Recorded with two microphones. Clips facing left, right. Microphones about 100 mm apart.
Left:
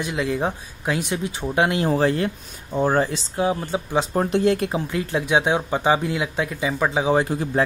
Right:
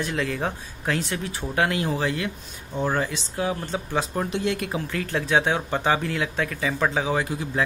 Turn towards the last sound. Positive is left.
turn(degrees=30)  # may be behind; listen again after turning